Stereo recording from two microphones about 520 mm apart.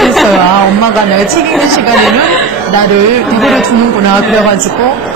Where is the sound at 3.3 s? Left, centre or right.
Centre.